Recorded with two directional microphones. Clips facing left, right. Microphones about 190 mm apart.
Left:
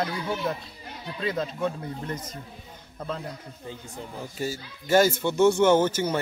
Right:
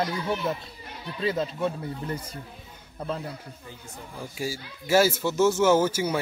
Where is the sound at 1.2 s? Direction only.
5° right (ahead or behind).